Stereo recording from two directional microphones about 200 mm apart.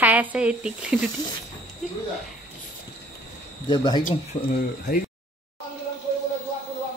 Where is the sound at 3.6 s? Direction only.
25° left (ahead or behind).